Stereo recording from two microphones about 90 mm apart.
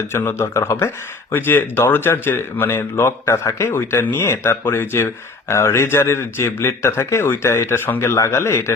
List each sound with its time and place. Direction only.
0.1 s speech: 30° left (ahead or behind)